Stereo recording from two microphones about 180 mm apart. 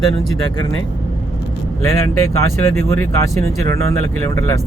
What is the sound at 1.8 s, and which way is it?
Speech, 15° left (ahead or behind).